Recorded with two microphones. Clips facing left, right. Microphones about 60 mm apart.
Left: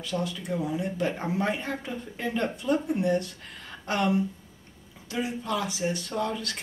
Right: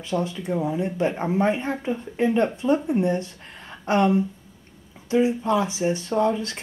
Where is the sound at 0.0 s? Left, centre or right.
Right.